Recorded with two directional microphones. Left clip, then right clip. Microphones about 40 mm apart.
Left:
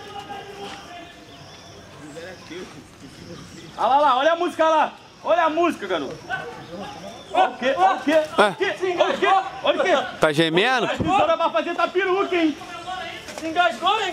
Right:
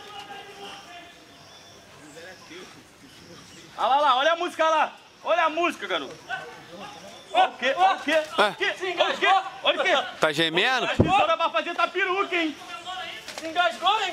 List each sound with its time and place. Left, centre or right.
3.8 s a man's voice: right
4.7 s a man's voice: right
5.5 s a man's voice: right
5.8 s a man's voice: right
7.3 s a man's voice: right
10.1 s a man's voice: centre
10.9 s a man's voice: right